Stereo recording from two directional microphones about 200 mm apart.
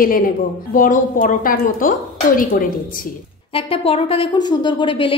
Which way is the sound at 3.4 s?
25° left (ahead or behind).